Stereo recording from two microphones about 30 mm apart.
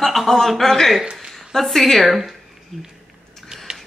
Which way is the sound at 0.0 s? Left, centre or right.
Centre.